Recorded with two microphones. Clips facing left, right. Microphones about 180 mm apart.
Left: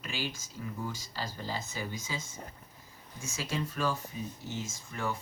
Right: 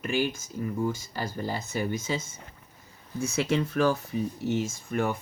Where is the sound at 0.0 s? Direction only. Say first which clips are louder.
Right 10 dB; 55° right (ahead or behind).